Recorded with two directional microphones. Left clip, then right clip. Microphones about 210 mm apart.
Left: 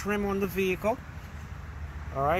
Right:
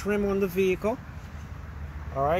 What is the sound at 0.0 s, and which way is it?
Speech, 5° right (ahead or behind).